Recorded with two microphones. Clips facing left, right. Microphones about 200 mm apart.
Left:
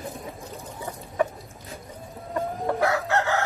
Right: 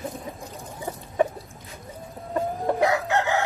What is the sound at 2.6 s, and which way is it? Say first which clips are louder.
Chicken: right 2 dB; 15° right (ahead or behind).